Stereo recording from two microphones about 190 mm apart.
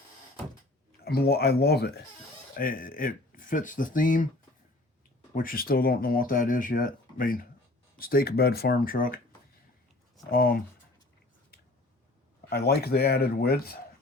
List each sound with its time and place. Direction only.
1.0 s speech: 55° left (ahead or behind)
5.3 s speech: 50° left (ahead or behind)
10.3 s speech: 50° left (ahead or behind)
12.5 s speech: 55° left (ahead or behind)